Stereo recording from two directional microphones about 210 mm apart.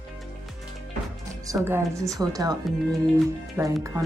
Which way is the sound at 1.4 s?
15° right (ahead or behind).